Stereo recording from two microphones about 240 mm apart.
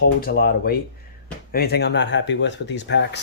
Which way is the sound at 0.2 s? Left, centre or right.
Left.